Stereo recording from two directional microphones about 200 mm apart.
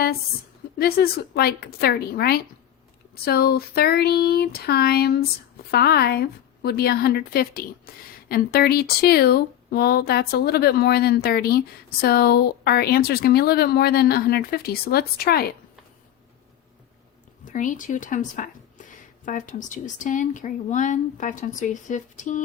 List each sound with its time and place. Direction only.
0.8 s speech: 50° left (ahead or behind)
17.4 s speech: 40° left (ahead or behind)